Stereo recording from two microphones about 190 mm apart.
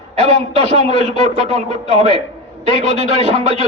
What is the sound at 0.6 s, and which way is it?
A man's voice, 35° right (ahead or behind).